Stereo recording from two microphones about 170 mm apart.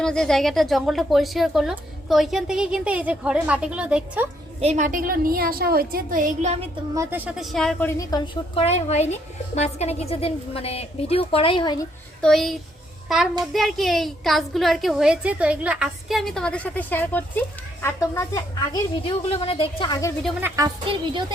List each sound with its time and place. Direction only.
0.0 s a woman's voice: 5° left (ahead or behind)
4.6 s a woman's voice: 45° right (ahead or behind)
6.9 s a woman's voice: 15° right (ahead or behind); by 7.9 s 5° left (ahead or behind)
7.9 s a woman's voice: 20° left (ahead or behind)
12.2 s a woman's voice: centre (ahead or behind); by 18.8 s 20° left (ahead or behind)
19.0 s a woman's voice: 35° left (ahead or behind)
20.4 s a woman's voice: 20° right (ahead or behind)